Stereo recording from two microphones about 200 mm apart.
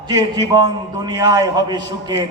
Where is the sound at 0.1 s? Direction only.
20° right (ahead or behind).